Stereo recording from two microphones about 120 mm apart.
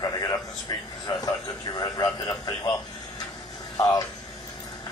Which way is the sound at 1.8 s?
30° left (ahead or behind).